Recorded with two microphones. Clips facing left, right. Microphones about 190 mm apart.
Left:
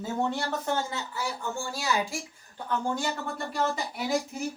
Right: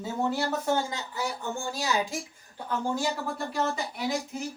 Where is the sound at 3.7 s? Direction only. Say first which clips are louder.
Even; 5° left (ahead or behind).